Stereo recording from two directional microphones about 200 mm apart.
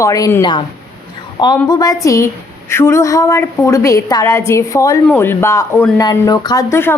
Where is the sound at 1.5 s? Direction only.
15° left (ahead or behind).